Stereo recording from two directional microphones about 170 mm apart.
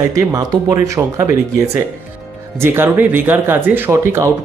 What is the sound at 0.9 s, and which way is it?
Speech, 15° right (ahead or behind).